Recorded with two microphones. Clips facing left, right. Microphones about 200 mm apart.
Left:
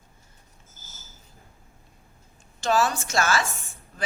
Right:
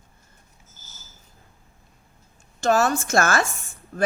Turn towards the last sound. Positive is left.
turn(degrees=-50)  # may be behind; listen again after turning